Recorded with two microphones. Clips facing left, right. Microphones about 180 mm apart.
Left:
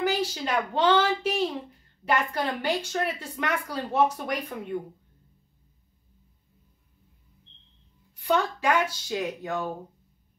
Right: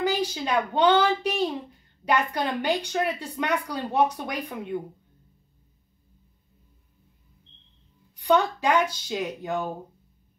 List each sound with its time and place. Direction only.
0.0 s a child's voice: 15° right (ahead or behind)
8.3 s a woman's voice: 15° right (ahead or behind)